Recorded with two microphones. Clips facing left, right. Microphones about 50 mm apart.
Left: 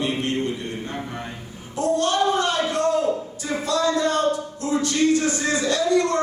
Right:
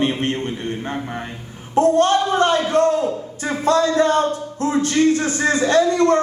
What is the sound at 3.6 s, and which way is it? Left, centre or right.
Speech, right.